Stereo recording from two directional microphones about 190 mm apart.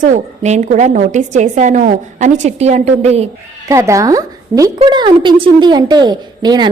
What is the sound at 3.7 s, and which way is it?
A woman's voice, 15° right (ahead or behind).